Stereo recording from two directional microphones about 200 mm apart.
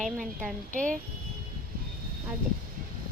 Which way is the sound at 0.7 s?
40° right (ahead or behind).